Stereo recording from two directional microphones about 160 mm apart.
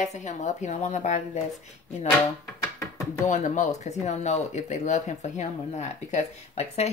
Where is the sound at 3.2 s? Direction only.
50° left (ahead or behind).